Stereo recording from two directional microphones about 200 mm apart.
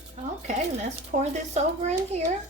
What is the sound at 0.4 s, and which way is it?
Speech, 35° right (ahead or behind).